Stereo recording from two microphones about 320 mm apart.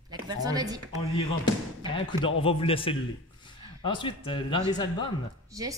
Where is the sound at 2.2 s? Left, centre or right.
Left.